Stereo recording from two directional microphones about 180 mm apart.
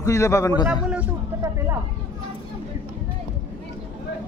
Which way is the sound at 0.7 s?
5° right (ahead or behind).